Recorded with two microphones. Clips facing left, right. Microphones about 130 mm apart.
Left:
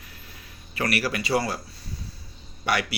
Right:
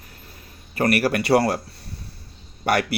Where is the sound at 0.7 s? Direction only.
50° right (ahead or behind); by 1.6 s 65° right (ahead or behind).